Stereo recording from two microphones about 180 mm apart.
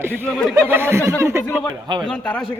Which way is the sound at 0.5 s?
10° right (ahead or behind).